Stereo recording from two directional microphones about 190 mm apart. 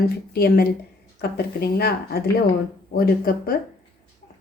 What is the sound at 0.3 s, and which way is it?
Speech, 55° left (ahead or behind).